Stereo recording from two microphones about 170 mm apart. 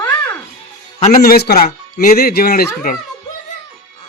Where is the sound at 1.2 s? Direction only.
70° left (ahead or behind).